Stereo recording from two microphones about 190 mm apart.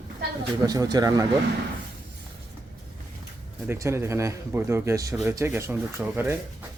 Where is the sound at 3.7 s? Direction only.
15° right (ahead or behind).